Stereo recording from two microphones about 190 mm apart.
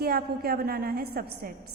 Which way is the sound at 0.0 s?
55° right (ahead or behind).